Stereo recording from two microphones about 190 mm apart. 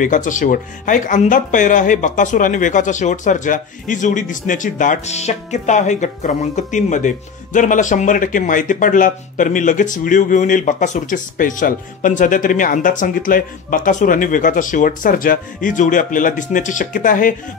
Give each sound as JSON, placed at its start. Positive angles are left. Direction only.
{"t": 0.0, "sound": "speech", "side_deg": 40}